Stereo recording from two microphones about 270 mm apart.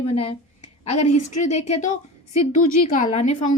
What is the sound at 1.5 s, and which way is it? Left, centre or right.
Speech, left.